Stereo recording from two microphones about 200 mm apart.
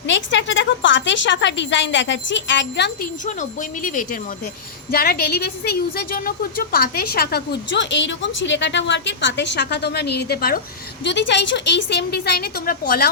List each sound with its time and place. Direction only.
0.1 s a woman's voice: 65° left (ahead or behind)
3.2 s a woman's voice: 40° left (ahead or behind)
11.0 s a woman's voice: 60° left (ahead or behind)